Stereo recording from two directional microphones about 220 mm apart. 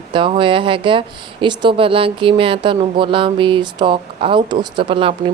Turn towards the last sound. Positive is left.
turn(degrees=-25)  # may be behind; listen again after turning